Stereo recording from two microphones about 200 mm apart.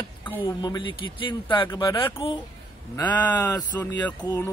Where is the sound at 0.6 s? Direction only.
20° left (ahead or behind).